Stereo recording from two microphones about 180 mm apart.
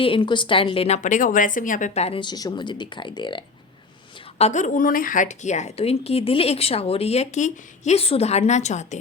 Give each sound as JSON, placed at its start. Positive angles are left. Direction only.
{"t": 0.0, "sound": "a woman's voice", "side_deg": 30}
{"t": 4.4, "sound": "a woman's voice", "side_deg": 40}